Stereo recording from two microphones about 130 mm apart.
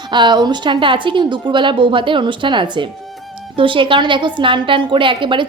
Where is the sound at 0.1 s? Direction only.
35° right (ahead or behind).